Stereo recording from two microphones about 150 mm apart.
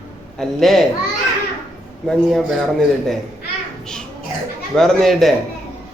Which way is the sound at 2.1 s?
Centre (ahead or behind).